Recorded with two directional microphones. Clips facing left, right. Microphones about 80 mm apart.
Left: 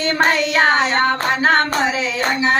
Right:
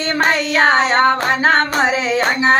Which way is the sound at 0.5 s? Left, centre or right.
Right.